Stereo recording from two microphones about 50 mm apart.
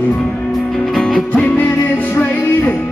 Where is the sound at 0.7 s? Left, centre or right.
Centre.